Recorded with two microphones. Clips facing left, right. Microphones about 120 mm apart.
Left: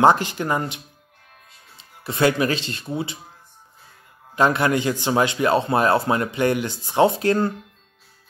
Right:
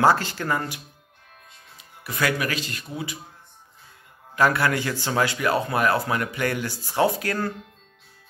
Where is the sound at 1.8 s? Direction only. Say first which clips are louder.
Left 7 dB; 25° left (ahead or behind).